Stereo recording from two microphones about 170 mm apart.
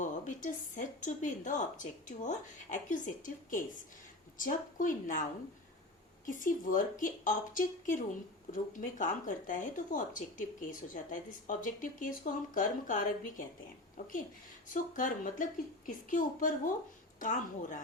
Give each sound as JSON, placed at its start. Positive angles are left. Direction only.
{"t": 0.0, "sound": "speech", "side_deg": 50}
{"t": 6.2, "sound": "speech", "side_deg": 50}
{"t": 14.7, "sound": "speech", "side_deg": 50}